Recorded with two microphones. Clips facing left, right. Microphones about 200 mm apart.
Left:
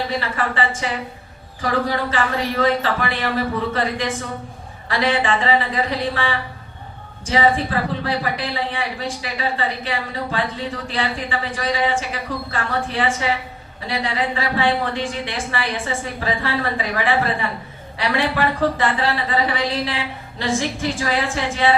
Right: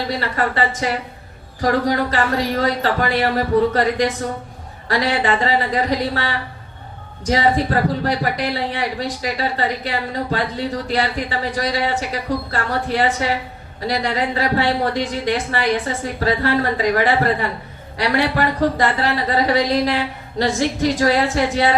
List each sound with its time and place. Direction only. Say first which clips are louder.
0.1 s a woman's voice: right 2 dB; 40° right (ahead or behind)